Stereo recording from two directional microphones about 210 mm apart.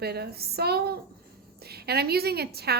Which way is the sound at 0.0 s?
50° right (ahead or behind).